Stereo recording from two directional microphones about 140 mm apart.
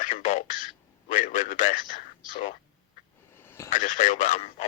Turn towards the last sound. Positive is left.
turn(degrees=50)  # may be behind; listen again after turning